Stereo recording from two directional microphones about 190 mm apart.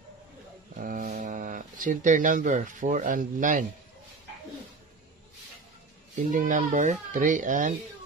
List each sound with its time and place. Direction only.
0.7 s speech: 45° right (ahead or behind)
6.1 s speech: 40° right (ahead or behind)